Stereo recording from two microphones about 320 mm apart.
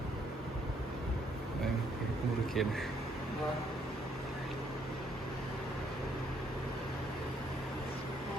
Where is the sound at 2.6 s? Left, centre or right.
Centre.